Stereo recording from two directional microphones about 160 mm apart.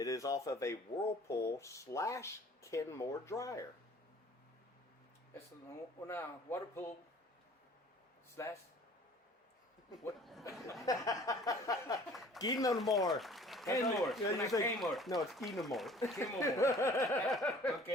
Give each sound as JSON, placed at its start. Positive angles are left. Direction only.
{"t": 0.0, "sound": "speech", "side_deg": 20}
{"t": 6.1, "sound": "speech", "side_deg": 15}
{"t": 8.4, "sound": "speech", "side_deg": 20}
{"t": 10.2, "sound": "speech", "side_deg": 0}
{"t": 10.8, "sound": "speech", "side_deg": 20}
{"t": 12.1, "sound": "a sound", "side_deg": 0}
{"t": 12.4, "sound": "speech", "side_deg": 25}
{"t": 12.8, "sound": "speech", "side_deg": 0}
{"t": 14.3, "sound": "speech", "side_deg": 20}
{"t": 14.8, "sound": "speech", "side_deg": 0}
{"t": 16.1, "sound": "speech", "side_deg": 20}
{"t": 17.2, "sound": "speech", "side_deg": 0}